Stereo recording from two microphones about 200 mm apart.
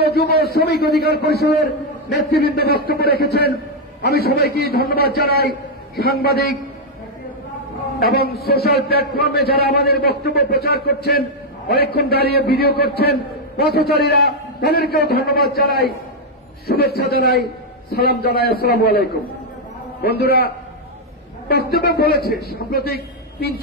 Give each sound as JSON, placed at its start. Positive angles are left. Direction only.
{"t": 0.0, "sound": "a man's voice", "side_deg": 50}
{"t": 8.0, "sound": "a man's voice", "side_deg": 50}
{"t": 21.5, "sound": "a man's voice", "side_deg": 50}